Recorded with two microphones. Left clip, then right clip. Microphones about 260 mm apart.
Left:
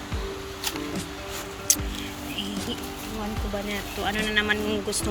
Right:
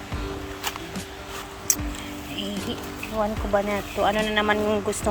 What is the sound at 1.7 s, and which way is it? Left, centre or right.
Music, centre.